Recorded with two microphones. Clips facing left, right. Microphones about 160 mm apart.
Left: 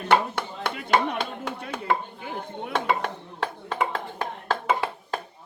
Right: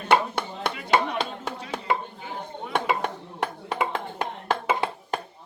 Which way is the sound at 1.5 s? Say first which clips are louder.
Even; 55° left (ahead or behind).